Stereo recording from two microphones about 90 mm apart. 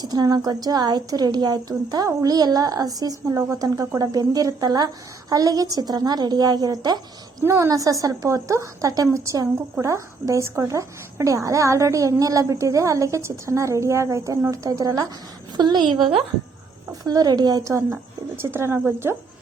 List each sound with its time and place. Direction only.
0.0 s a woman's voice: 50° right (ahead or behind)
7.4 s a woman's voice: 30° right (ahead or behind)
15.5 s a woman's voice: 50° right (ahead or behind); by 19.1 s 25° right (ahead or behind)